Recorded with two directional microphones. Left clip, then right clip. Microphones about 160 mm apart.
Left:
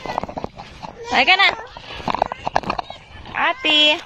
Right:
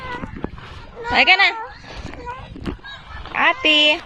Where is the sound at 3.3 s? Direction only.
15° right (ahead or behind).